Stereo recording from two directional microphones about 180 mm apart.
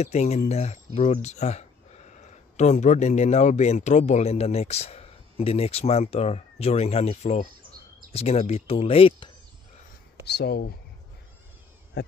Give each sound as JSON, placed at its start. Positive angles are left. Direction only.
{"t": 0.0, "sound": "speech", "side_deg": 35}
{"t": 10.2, "sound": "speech", "side_deg": 65}